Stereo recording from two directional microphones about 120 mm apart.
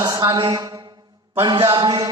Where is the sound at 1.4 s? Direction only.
40° right (ahead or behind).